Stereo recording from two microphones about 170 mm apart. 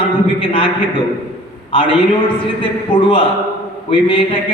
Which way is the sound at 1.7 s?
30° left (ahead or behind).